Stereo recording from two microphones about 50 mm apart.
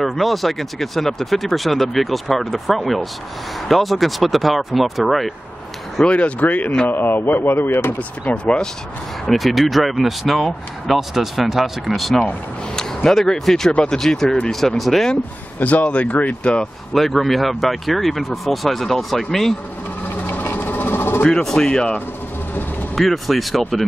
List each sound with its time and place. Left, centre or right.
0.0 s speech: centre
6.0 s speech: left
6.9 s speech: left
8.3 s speech: left
9.2 s speech: centre
12.7 s speech: centre
15.6 s speech: left
16.9 s speech: centre
20.5 s a sound: left
21.2 s speech: centre
22.9 s speech: centre